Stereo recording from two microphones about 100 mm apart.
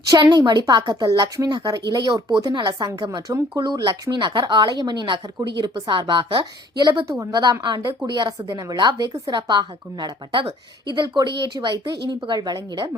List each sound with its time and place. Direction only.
0.1 s a woman's voice: 45° right (ahead or behind)
7.2 s a woman's voice: 40° right (ahead or behind)